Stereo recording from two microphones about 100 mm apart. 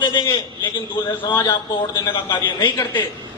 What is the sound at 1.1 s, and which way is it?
Speech, 20° left (ahead or behind).